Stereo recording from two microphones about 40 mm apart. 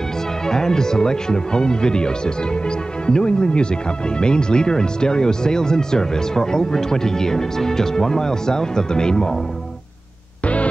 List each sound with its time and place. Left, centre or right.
0.5 s speech: centre
10.4 s music: left